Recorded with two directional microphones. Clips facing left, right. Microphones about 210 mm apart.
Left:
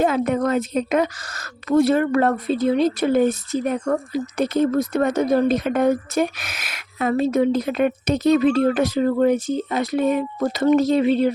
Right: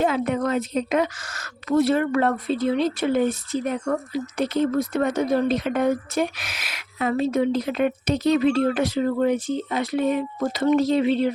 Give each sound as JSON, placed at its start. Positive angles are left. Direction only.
{"t": 0.0, "sound": "a woman's voice", "side_deg": 45}